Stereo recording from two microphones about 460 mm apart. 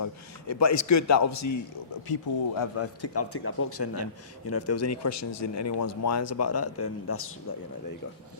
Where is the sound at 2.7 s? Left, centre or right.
Left.